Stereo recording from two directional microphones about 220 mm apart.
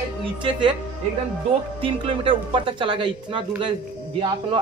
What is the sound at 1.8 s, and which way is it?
A man's voice, 25° right (ahead or behind).